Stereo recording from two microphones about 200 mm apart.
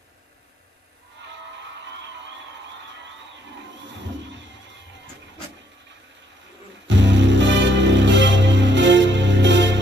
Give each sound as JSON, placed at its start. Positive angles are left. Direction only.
{"t": 6.9, "sound": "music", "side_deg": -65}